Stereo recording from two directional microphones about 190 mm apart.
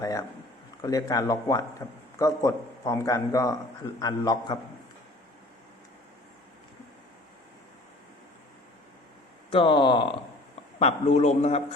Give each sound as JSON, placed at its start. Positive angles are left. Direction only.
{"t": 0.0, "sound": "a man's voice", "side_deg": 15}
{"t": 9.5, "sound": "speech", "side_deg": 25}